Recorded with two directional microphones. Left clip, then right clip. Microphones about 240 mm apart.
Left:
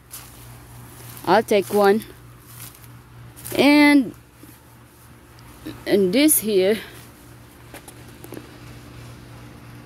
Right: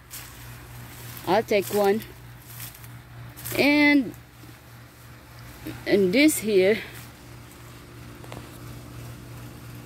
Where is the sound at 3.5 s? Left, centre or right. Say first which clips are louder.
Left 5 dB; left.